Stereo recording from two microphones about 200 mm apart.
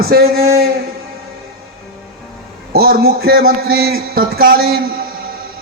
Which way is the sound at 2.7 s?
50° right (ahead or behind).